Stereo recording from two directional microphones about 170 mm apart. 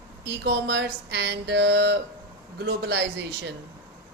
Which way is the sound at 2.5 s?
75° right (ahead or behind).